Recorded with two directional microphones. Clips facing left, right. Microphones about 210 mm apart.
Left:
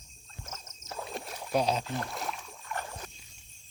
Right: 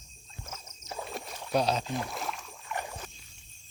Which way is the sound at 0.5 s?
15° right (ahead or behind).